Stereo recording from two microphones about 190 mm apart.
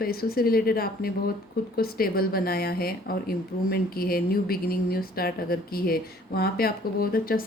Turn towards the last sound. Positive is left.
turn(degrees=50)  # may be behind; listen again after turning